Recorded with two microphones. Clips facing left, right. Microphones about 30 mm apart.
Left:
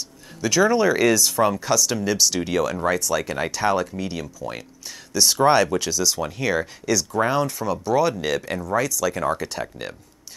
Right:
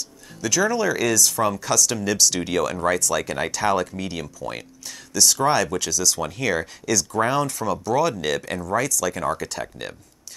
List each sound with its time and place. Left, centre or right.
0.4 s speech: centre
2.7 s speech: centre
4.8 s speech: centre
6.1 s speech: centre